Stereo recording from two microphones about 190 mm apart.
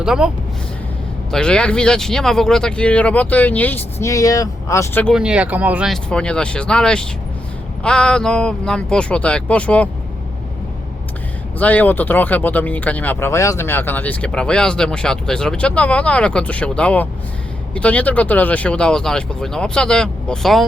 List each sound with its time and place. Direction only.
0.0 s speech: 5° right (ahead or behind)
1.3 s speech: 5° left (ahead or behind)
5.1 s speech: 5° right (ahead or behind)
11.6 s speech: 10° left (ahead or behind)